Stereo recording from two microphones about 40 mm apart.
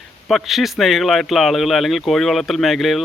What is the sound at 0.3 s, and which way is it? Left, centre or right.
Speech, centre.